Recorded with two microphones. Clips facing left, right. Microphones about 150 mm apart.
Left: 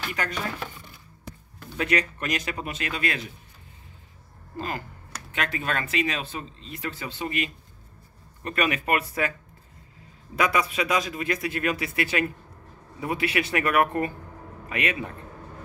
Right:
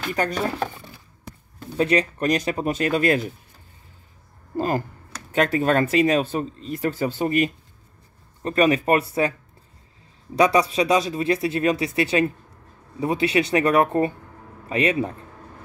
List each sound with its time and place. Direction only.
0.1 s speech: 35° right (ahead or behind)
1.8 s speech: 30° right (ahead or behind)
4.6 s speech: 40° right (ahead or behind)
10.3 s speech: 35° right (ahead or behind)